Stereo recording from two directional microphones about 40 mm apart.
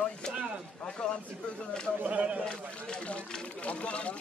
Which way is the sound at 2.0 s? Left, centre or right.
Right.